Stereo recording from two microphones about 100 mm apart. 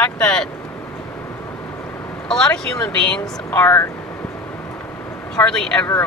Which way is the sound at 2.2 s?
5° left (ahead or behind).